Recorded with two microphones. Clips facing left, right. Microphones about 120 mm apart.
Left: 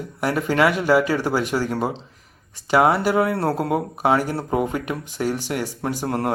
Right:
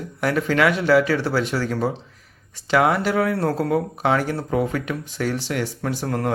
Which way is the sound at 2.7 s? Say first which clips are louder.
Left 1 dB; 35° left (ahead or behind).